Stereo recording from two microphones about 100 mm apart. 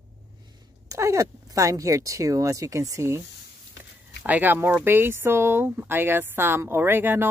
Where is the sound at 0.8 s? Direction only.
30° right (ahead or behind).